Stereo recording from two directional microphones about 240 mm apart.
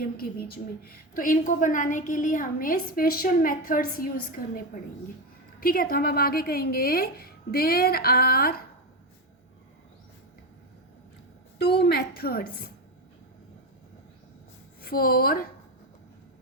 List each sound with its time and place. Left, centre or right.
0.2 s a woman's voice: left
11.6 s a woman's voice: left
14.8 s a woman's voice: left